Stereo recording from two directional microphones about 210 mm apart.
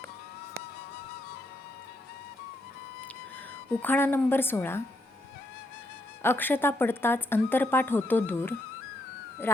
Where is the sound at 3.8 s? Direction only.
10° left (ahead or behind).